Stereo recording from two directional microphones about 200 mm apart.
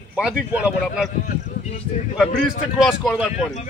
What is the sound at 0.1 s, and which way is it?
Speech, 5° right (ahead or behind).